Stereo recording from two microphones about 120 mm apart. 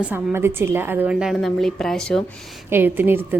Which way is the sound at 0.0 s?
20° right (ahead or behind).